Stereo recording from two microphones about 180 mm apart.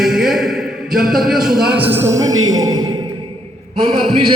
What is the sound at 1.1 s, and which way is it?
Speech, centre (ahead or behind).